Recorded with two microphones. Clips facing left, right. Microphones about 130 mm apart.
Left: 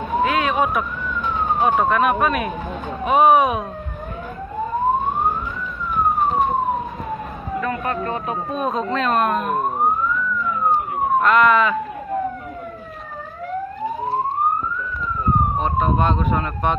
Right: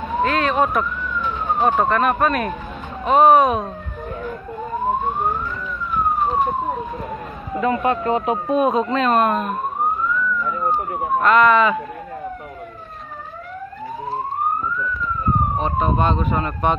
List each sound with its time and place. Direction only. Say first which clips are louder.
0.2 s police car: right 1 dB; 5° left (ahead or behind)
1.8 s speech: even; 5° left (ahead or behind)
7.6 s speech: right 6 dB; 20° right (ahead or behind)
8.5 s speech: right 4 dB; 5° right (ahead or behind)
11.1 s speech: right 1 dB; centre (ahead or behind)
15.6 s speech: even; centre (ahead or behind)